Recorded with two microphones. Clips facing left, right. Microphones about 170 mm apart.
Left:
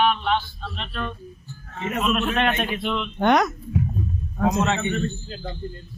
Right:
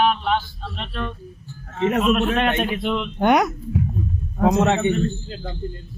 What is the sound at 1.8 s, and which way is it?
Speech, 90° right.